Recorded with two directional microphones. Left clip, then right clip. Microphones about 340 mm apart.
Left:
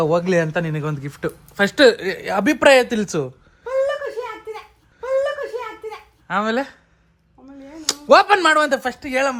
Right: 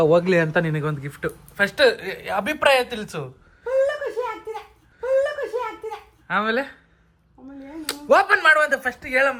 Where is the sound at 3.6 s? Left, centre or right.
Centre.